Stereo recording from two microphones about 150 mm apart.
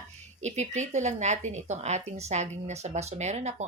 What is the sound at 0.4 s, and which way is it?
Speech, 50° right (ahead or behind).